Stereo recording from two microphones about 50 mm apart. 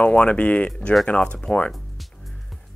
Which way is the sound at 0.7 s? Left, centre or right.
Centre.